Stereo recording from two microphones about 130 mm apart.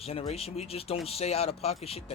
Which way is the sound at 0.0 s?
50° left (ahead or behind).